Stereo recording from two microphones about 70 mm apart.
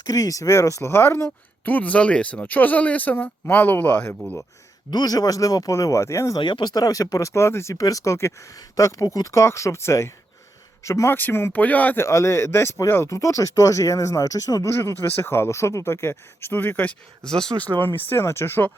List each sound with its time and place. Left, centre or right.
0.0 s speech: left
4.9 s speech: left
6.3 s speech: left
11.1 s speech: left
11.9 s speech: left
14.7 s speech: left
17.2 s speech: centre
17.7 s speech: left